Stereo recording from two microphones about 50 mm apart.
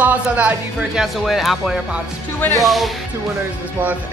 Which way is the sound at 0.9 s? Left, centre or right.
Centre.